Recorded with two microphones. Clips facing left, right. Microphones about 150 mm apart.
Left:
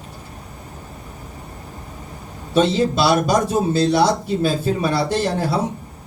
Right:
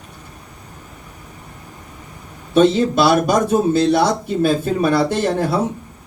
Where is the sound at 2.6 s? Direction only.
55° right (ahead or behind).